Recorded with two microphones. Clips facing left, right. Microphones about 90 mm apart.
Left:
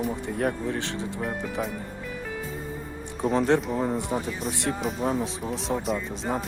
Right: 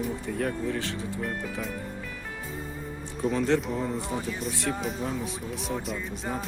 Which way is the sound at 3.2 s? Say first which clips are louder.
Left 3 dB; 40° left (ahead or behind).